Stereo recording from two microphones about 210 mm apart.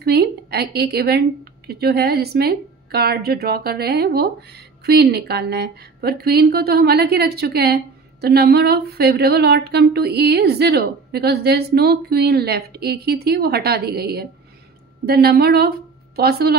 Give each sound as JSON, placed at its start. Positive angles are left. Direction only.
{"t": 0.0, "sound": "a woman's voice", "side_deg": -50}